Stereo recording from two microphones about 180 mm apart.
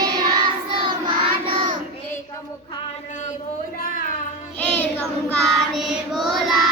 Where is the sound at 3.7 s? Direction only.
55° left (ahead or behind).